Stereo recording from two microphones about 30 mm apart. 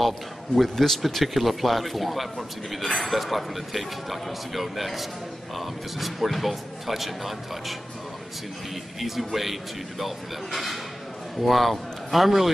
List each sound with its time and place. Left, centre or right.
0.6 s speech: centre
9.2 s a man's voice: centre